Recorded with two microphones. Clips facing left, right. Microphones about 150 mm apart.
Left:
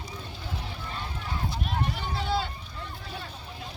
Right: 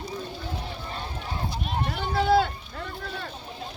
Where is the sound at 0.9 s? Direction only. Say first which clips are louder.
Even; 30° right (ahead or behind).